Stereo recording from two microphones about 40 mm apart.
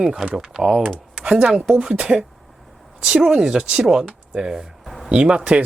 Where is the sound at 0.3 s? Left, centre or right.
Centre.